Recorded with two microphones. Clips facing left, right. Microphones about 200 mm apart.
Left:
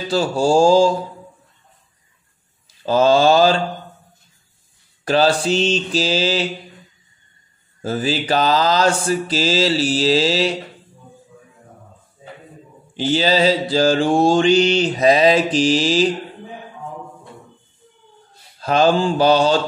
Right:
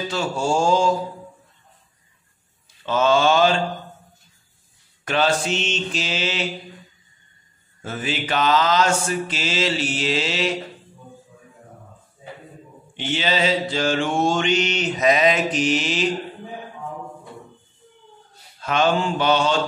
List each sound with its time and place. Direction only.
0.1 s mantra: 35° left (ahead or behind)
2.8 s mantra: 35° left (ahead or behind)
5.0 s mantra: 35° left (ahead or behind)
7.8 s mantra: 35° left (ahead or behind)
12.9 s mantra: 35° left (ahead or behind)
18.6 s mantra: 35° left (ahead or behind)